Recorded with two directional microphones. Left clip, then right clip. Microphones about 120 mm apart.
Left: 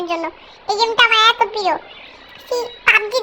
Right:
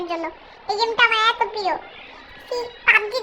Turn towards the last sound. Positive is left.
turn(degrees=30)  # may be behind; listen again after turning